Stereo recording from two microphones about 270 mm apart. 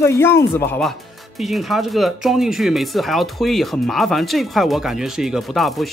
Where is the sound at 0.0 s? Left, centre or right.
Centre.